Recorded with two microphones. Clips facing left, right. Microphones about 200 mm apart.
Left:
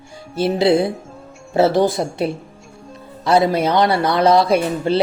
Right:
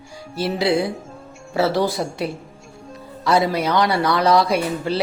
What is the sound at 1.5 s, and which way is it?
Speech, 20° left (ahead or behind).